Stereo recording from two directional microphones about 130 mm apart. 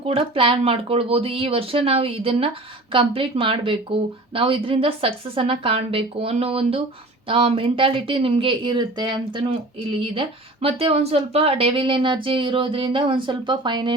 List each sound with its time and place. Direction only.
0.0 s speech: 45° right (ahead or behind)